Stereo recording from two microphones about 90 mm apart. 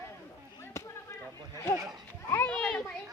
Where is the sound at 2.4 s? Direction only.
10° left (ahead or behind).